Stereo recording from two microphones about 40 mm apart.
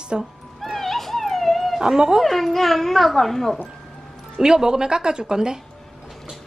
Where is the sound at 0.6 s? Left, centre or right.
Centre.